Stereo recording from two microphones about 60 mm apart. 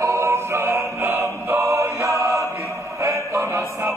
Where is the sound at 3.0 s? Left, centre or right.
Right.